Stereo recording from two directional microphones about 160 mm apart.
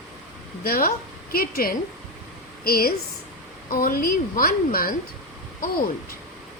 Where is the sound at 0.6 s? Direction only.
70° left (ahead or behind).